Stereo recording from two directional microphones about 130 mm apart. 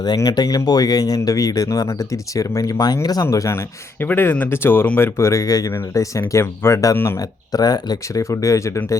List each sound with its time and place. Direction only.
0.0 s speech: 30° left (ahead or behind)